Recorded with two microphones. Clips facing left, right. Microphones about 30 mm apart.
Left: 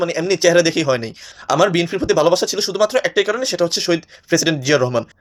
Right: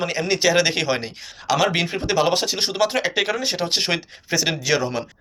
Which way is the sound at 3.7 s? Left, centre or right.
Right.